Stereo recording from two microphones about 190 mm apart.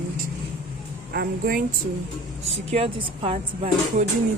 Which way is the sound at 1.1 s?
50° right (ahead or behind).